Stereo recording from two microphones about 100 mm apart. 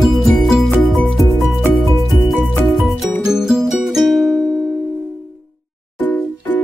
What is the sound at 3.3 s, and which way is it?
Music, 5° right (ahead or behind).